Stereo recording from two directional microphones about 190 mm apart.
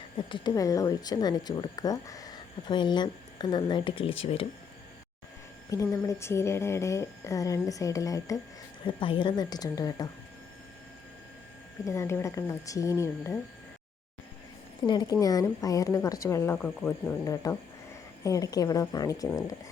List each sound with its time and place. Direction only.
0.3 s speech: 25° left (ahead or behind)
5.7 s a woman's voice: 15° left (ahead or behind)
11.9 s a woman's voice: 15° left (ahead or behind)
14.8 s a woman's voice: 20° left (ahead or behind)